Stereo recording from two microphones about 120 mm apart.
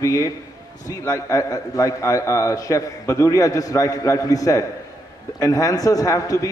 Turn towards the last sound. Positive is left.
turn(degrees=30)  # may be behind; listen again after turning